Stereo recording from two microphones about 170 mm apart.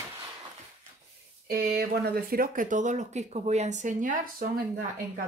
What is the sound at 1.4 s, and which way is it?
Speech, 60° right (ahead or behind).